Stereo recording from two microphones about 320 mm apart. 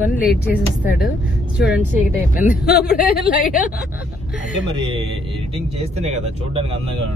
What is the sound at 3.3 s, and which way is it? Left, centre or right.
Speech, left.